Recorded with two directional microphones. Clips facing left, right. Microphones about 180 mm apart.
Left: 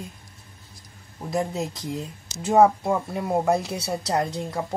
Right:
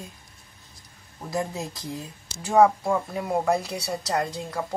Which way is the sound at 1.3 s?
20° left (ahead or behind).